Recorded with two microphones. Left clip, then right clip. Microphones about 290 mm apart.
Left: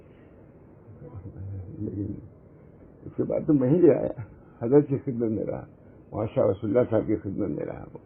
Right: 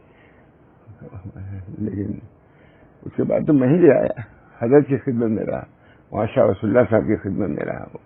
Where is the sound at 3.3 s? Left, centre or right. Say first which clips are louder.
Right 6 dB; right.